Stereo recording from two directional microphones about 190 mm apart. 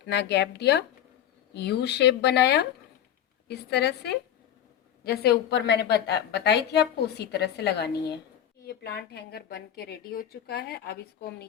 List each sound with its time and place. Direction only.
0.0 s a woman's voice: 65° left (ahead or behind)